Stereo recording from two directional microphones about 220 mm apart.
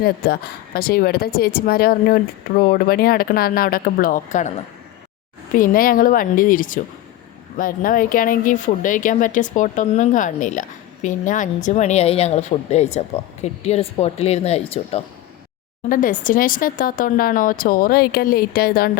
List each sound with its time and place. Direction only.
0.0 s a woman's voice: 45° left (ahead or behind); by 15.0 s 25° left (ahead or behind)
15.9 s speech: 35° left (ahead or behind)